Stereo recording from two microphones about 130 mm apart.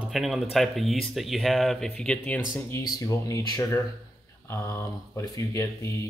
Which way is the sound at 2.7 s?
25° left (ahead or behind).